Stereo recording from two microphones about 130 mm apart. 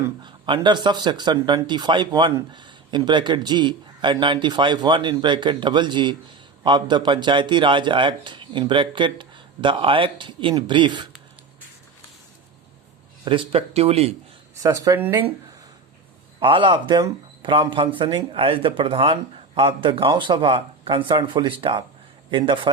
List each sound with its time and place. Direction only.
0.2 s speech: 35° right (ahead or behind)
13.2 s speech: 40° right (ahead or behind)
14.6 s speech: 25° right (ahead or behind)
16.4 s speech: 40° right (ahead or behind)